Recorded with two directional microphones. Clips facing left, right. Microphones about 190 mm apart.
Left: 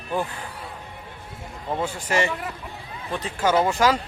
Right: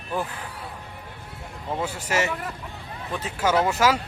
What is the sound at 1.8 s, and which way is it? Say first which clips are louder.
Speech: left 2 dB; 10° right (ahead or behind).